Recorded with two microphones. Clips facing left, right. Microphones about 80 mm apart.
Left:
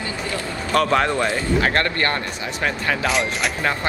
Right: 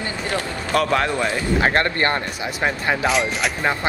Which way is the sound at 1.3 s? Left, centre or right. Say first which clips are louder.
Right 1 dB; right.